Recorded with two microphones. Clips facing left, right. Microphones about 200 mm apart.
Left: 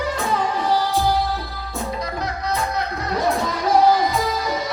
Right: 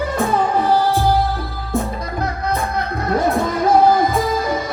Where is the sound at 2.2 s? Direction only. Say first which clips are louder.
Right 5 dB; 55° right (ahead or behind).